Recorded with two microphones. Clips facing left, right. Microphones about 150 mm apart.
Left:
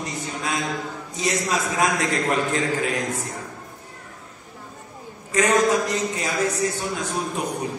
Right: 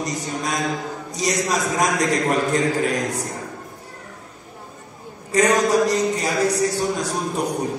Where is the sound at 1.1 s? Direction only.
40° right (ahead or behind).